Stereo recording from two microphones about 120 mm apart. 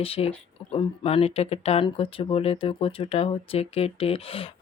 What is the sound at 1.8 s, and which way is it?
Speech, 50° left (ahead or behind).